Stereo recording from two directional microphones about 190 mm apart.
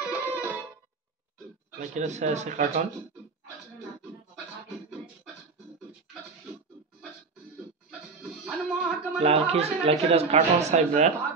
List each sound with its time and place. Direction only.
0.1 s music: 10° right (ahead or behind)
1.8 s speech: 40° right (ahead or behind)
8.2 s music: centre (ahead or behind)
9.2 s speech: 30° right (ahead or behind)